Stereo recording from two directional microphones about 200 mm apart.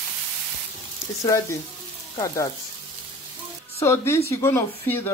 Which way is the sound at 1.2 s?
15° left (ahead or behind).